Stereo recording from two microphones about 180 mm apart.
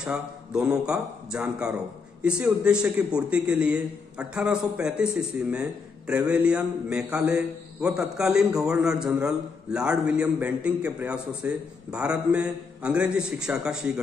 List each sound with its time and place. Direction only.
0.0 s a man's voice: 5° right (ahead or behind)